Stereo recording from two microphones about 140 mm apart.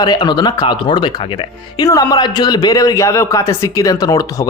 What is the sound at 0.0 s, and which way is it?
Speech, 30° left (ahead or behind).